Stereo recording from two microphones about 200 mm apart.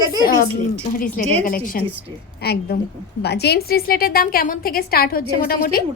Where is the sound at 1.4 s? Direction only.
45° left (ahead or behind).